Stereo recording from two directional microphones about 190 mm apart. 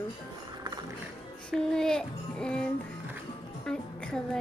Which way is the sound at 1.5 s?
5° left (ahead or behind).